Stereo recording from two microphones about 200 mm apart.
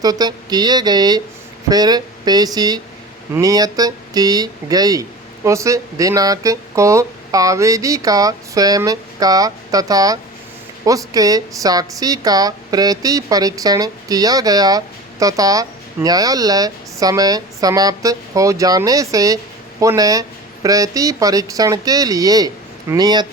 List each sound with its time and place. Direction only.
0.0 s a woman's voice: 20° right (ahead or behind)